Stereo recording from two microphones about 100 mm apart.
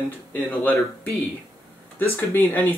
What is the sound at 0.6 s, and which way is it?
Speech, 15° left (ahead or behind).